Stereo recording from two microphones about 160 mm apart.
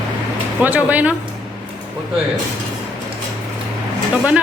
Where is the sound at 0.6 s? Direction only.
10° right (ahead or behind).